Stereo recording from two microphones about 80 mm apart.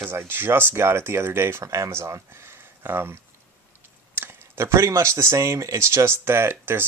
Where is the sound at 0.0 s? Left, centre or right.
Right.